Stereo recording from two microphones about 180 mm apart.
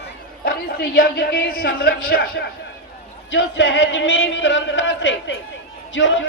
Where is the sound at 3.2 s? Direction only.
90° left.